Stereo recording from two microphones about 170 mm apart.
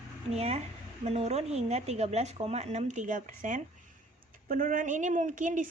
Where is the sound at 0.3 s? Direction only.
40° right (ahead or behind).